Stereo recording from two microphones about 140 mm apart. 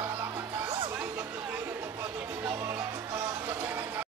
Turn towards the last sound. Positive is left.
turn(degrees=-15)  # may be behind; listen again after turning